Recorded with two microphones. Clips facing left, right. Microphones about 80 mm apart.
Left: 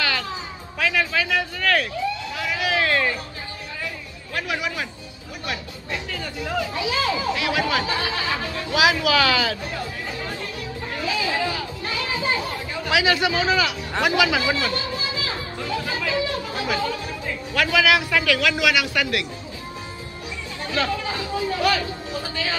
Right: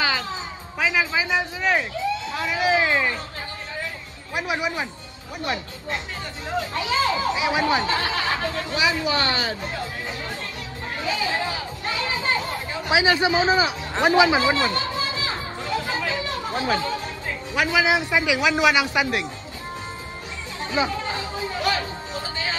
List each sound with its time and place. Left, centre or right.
0.0 s a sound: centre
2.4 s speech: right
2.8 s speech: centre
4.4 s speech: right
8.7 s speech: left
11.1 s speech: right
16.6 s speech: right
17.6 s speech: centre
20.7 s speech: right